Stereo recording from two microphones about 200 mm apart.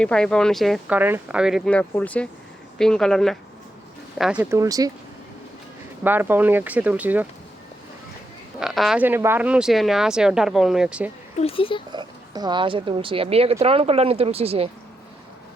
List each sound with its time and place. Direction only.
0.0 s speech: 5° left (ahead or behind); by 4.9 s 15° right (ahead or behind)
6.0 s speech: 10° right (ahead or behind)
8.5 s speech: centre (ahead or behind)
11.3 s speech: 30° left (ahead or behind)
11.9 s speech: 20° right (ahead or behind)